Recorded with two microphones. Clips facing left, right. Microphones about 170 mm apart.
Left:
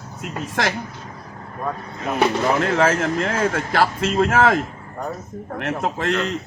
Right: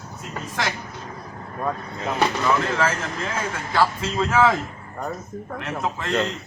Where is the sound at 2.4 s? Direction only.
60° left (ahead or behind).